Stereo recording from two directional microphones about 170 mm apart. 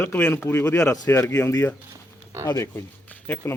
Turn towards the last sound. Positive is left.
turn(degrees=10)  # may be behind; listen again after turning